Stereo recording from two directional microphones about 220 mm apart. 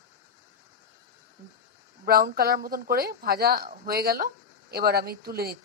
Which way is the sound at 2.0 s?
40° right (ahead or behind).